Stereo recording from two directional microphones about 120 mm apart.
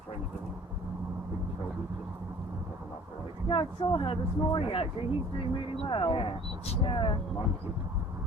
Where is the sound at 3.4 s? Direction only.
45° left (ahead or behind).